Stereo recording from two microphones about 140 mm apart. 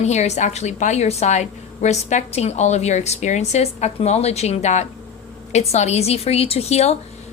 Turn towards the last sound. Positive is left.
turn(degrees=50)  # may be behind; listen again after turning